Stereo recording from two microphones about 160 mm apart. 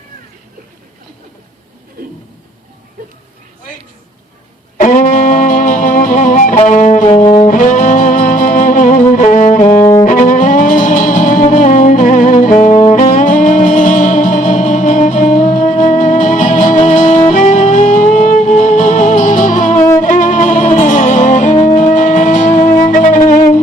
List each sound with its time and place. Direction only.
4.8 s music: 50° left (ahead or behind)
9.6 s music: 20° left (ahead or behind)
10.0 s music: 50° left (ahead or behind)
21.8 s shofar: 50° left (ahead or behind)
22.8 s music: 55° left (ahead or behind)